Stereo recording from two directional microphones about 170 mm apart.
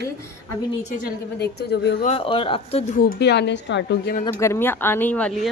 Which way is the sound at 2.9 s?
60° left (ahead or behind).